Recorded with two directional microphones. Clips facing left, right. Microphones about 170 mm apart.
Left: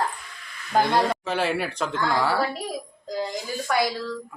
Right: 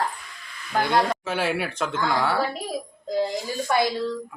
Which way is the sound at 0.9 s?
Centre (ahead or behind).